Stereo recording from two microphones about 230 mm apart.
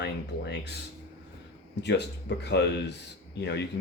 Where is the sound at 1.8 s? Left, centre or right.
Left.